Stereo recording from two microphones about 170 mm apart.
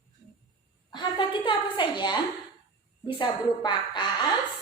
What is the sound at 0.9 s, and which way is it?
Speech, 30° left (ahead or behind).